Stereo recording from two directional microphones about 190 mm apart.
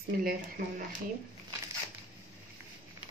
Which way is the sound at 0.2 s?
50° right (ahead or behind).